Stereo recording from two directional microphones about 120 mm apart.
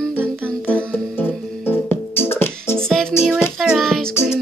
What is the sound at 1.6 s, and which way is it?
Music, 20° left (ahead or behind).